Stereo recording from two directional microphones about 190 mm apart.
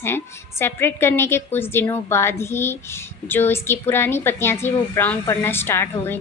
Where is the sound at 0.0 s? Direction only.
10° left (ahead or behind).